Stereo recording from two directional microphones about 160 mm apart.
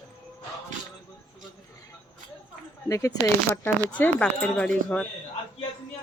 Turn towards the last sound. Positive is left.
turn(degrees=5)  # may be behind; listen again after turning